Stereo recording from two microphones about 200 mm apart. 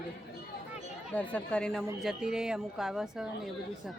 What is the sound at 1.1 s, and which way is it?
A woman's voice, 5° left (ahead or behind).